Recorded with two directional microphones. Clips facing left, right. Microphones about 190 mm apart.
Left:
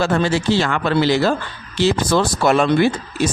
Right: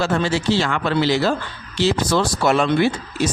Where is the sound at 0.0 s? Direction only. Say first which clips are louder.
Left 2 dB; 50° left (ahead or behind).